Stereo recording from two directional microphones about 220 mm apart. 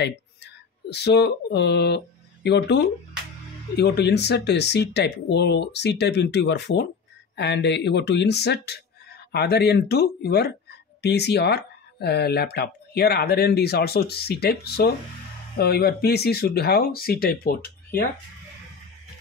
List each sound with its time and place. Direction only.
0.0 s speech: 50° left (ahead or behind)